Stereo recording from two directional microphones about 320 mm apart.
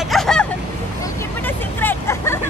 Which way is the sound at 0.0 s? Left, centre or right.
Centre.